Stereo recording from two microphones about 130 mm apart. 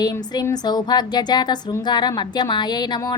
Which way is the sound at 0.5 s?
30° left (ahead or behind).